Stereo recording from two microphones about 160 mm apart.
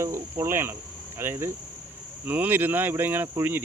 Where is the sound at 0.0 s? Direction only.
15° right (ahead or behind).